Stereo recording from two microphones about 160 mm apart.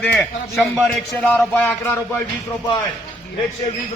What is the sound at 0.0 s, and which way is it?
Speech, 5° left (ahead or behind).